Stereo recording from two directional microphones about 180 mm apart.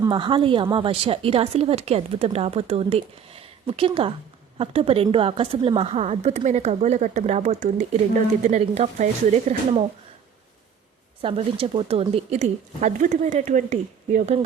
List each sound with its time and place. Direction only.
0.0 s a woman's voice: 25° right (ahead or behind)
11.2 s a woman's voice: 30° right (ahead or behind)